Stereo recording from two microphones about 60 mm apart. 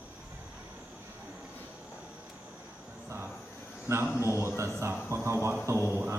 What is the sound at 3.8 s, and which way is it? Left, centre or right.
A man's voice, right.